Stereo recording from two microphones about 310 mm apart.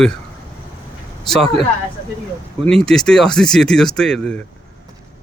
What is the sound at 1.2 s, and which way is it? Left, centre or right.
Speech, centre.